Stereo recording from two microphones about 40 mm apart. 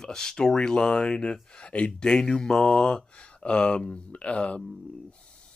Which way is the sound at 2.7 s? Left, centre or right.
Left.